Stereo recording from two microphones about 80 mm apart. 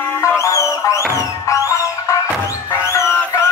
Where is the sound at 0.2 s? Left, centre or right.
Left.